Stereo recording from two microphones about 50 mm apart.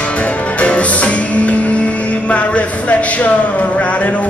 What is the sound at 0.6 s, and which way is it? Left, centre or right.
Music, left.